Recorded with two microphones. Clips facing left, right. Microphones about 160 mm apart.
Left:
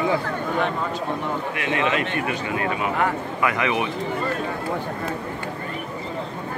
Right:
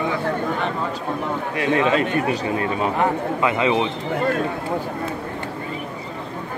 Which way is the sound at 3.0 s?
25° right (ahead or behind).